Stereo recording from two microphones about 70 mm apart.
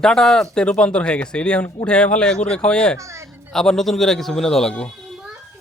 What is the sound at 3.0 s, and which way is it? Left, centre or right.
Speech, right.